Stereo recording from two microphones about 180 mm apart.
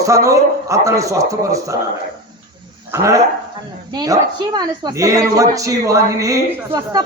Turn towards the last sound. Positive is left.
turn(degrees=-20)  # may be behind; listen again after turning